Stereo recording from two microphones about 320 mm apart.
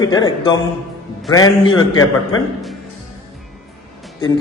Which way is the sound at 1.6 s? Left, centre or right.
Centre.